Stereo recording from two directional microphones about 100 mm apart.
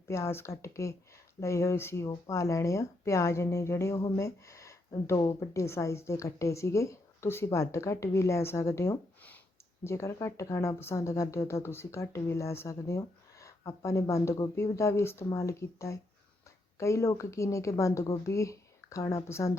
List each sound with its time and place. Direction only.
0.1 s a woman's voice: 25° left (ahead or behind)